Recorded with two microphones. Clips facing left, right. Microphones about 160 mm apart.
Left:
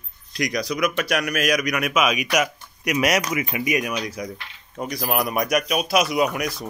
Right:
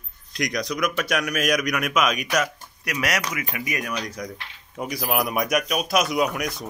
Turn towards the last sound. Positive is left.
turn(degrees=0)  # may be behind; listen again after turning